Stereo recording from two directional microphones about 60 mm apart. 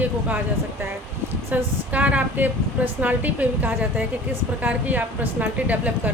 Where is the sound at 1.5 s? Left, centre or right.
Right.